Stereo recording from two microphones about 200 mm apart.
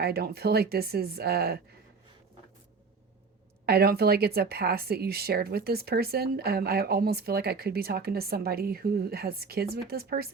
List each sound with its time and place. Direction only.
0.0 s speech: 50° right (ahead or behind)
3.7 s speech: 50° right (ahead or behind)